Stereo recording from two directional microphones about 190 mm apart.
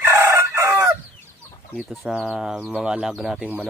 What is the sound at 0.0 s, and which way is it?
Chicken, 15° right (ahead or behind).